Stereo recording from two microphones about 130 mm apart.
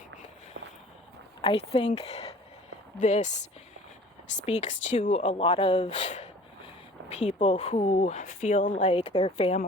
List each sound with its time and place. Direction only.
1.4 s a woman's voice: 45° left (ahead or behind)
3.0 s speech: 65° left (ahead or behind)
9.1 s a woman's voice: 45° left (ahead or behind)